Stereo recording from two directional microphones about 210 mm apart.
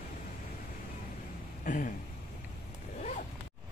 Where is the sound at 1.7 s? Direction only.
35° left (ahead or behind).